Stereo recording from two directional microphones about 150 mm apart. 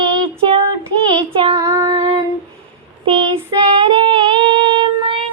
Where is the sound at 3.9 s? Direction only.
35° right (ahead or behind).